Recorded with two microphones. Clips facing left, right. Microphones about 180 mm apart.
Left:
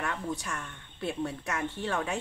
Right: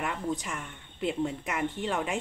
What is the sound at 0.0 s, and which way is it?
A woman's voice, 15° right (ahead or behind).